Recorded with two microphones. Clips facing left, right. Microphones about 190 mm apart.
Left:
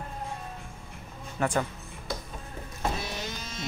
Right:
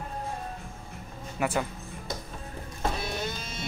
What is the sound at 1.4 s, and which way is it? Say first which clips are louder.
Speech: left 1 dB; 10° right (ahead or behind).